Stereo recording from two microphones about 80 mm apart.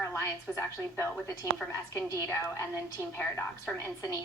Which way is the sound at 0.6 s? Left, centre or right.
Left.